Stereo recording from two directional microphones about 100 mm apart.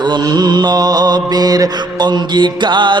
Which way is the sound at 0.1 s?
45° right (ahead or behind).